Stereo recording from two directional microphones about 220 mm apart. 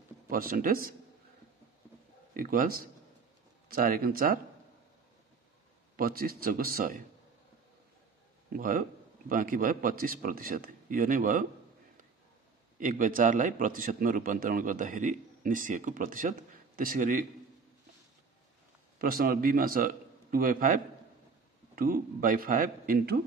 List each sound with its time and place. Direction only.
0.3 s a man's voice: 40° right (ahead or behind)
2.3 s a man's voice: 40° right (ahead or behind)
5.9 s a man's voice: 40° right (ahead or behind)
8.5 s a man's voice: 40° right (ahead or behind)
12.7 s a man's voice: 35° right (ahead or behind)
18.9 s a man's voice: 40° right (ahead or behind)